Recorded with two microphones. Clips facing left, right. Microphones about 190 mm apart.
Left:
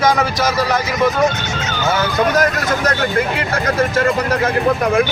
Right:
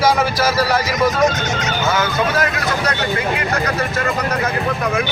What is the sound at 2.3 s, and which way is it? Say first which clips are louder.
Speech: left 3 dB; 45° left (ahead or behind).